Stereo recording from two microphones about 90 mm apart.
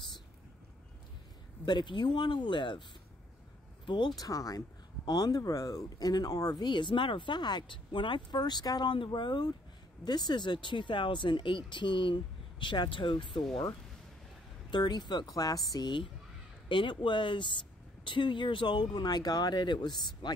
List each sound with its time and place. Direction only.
1.7 s speech: 60° left (ahead or behind)
3.8 s speech: 60° left (ahead or behind)
4.1 s speech: 40° left (ahead or behind)
6.7 s speech: 65° left (ahead or behind)
14.7 s speech: 55° left (ahead or behind)
16.6 s speech: 65° left (ahead or behind)